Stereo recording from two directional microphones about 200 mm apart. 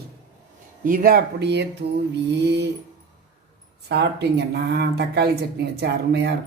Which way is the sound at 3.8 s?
55° right (ahead or behind).